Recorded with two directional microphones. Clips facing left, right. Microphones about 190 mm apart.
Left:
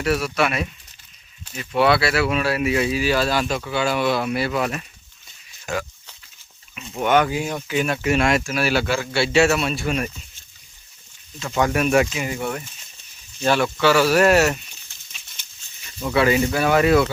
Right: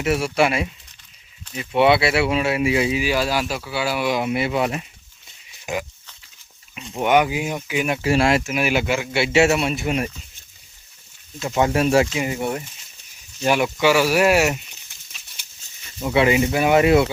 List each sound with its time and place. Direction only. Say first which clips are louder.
0.0 s speech: right 2 dB; 25° right (ahead or behind)
7.0 s speech: right 1 dB; 15° right (ahead or behind)
8.0 s speech: right 3 dB; 30° right (ahead or behind)
8.5 s speech: even; 15° right (ahead or behind)
11.4 s speech: right 2 dB; 25° right (ahead or behind)
16.0 s speech: right 1 dB; 20° right (ahead or behind)